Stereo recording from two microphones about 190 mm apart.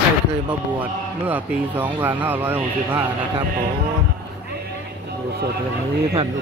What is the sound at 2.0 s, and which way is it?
Speech, 10° right (ahead or behind).